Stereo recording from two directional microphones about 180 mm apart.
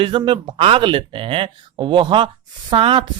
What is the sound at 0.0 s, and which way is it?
Speech, 25° right (ahead or behind).